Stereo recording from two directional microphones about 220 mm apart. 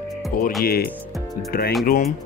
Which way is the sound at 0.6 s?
45° left (ahead or behind).